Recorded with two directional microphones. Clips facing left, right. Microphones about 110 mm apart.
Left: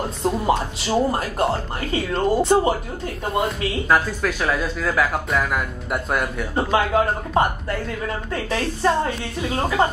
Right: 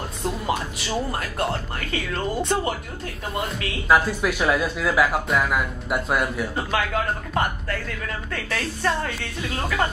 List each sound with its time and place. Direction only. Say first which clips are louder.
0.5 s speech: left 5 dB; 25° left (ahead or behind)
3.9 s speech: right 2 dB; 10° right (ahead or behind)
6.5 s speech: left 5 dB; 30° left (ahead or behind)